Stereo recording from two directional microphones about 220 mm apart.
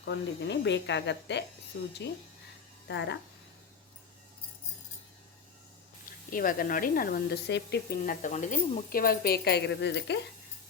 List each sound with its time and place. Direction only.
0.0 s speech: 50° left (ahead or behind)
6.3 s speech: 40° left (ahead or behind)